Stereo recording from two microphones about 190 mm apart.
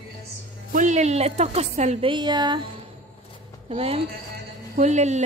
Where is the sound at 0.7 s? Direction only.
40° right (ahead or behind); by 2.6 s 20° right (ahead or behind).